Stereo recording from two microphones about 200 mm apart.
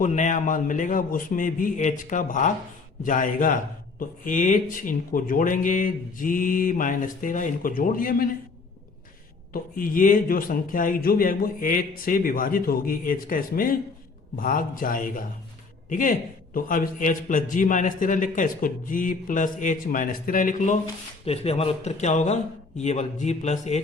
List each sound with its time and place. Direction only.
0.0 s a man's voice: 35° left (ahead or behind)
9.5 s a man's voice: 45° left (ahead or behind)
21.2 s a man's voice: 30° left (ahead or behind)